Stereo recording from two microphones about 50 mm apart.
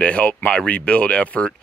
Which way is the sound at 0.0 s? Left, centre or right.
Left.